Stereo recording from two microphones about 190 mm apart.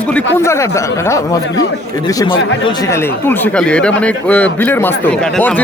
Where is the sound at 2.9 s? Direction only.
10° left (ahead or behind).